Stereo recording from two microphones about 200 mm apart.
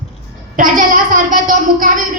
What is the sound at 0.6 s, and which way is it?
Speech, 40° right (ahead or behind).